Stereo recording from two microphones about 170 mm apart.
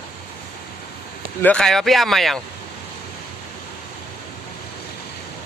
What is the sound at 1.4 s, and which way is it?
Speech, 5° left (ahead or behind).